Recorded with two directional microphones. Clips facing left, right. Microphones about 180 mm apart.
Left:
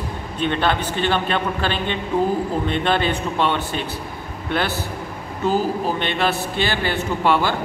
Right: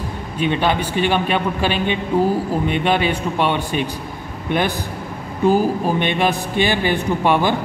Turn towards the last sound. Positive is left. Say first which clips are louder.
# right 2 dB
turn(degrees=-15)  # may be behind; listen again after turning